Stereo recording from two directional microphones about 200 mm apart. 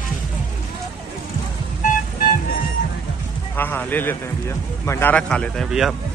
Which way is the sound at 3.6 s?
10° left (ahead or behind).